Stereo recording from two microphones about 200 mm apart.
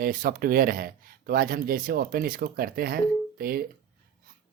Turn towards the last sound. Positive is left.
turn(degrees=-50)  # may be behind; listen again after turning